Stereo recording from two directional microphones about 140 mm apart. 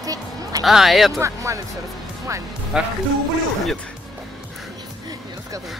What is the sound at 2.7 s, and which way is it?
Speech, 5° right (ahead or behind).